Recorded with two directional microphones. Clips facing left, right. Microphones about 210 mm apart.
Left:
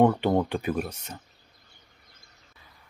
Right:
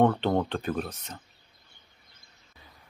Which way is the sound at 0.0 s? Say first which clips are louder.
Left 2 dB; 10° left (ahead or behind).